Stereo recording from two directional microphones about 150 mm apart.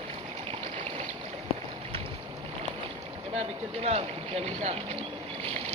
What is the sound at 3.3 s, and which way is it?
Speech, 45° right (ahead or behind).